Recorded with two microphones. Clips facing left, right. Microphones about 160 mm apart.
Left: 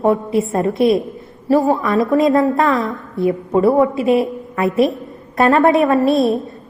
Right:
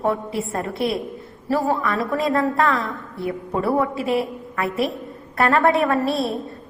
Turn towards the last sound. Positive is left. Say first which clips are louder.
# left 7 dB
turn(degrees=20)  # may be behind; listen again after turning